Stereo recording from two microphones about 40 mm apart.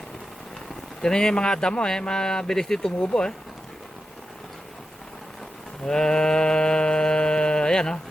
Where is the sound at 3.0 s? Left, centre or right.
Left.